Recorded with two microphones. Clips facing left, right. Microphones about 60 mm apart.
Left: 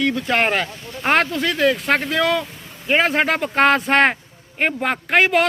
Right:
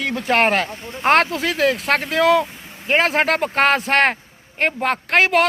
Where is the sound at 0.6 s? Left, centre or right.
Right.